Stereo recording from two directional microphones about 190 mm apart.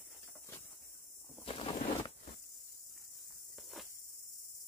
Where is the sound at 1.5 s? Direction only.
30° left (ahead or behind).